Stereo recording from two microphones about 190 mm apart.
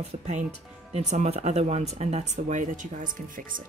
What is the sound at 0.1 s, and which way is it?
Speech, 40° right (ahead or behind).